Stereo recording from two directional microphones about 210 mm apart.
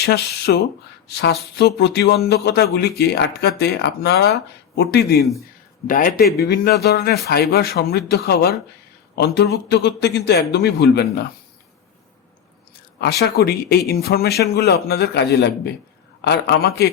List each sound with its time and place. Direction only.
0.0 s speech: 50° left (ahead or behind)
13.0 s speech: 50° left (ahead or behind)